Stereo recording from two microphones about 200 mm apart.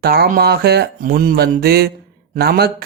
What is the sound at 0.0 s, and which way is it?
Speech, 50° right (ahead or behind).